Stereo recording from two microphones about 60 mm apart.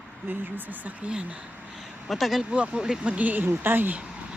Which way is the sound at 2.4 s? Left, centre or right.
Centre.